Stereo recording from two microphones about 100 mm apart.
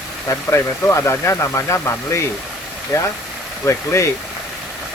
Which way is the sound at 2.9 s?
30° left (ahead or behind).